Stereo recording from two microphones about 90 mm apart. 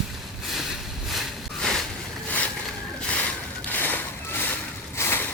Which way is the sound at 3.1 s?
15° left (ahead or behind).